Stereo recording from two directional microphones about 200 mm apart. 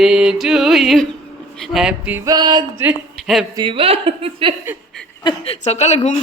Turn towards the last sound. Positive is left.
turn(degrees=35)  # may be behind; listen again after turning